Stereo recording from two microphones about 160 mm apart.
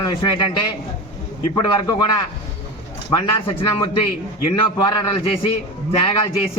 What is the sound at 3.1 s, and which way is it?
Speech, 35° left (ahead or behind).